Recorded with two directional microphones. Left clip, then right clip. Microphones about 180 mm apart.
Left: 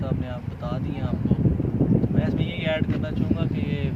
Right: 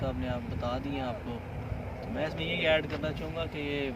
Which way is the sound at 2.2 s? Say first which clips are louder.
Left 2 dB; 5° left (ahead or behind).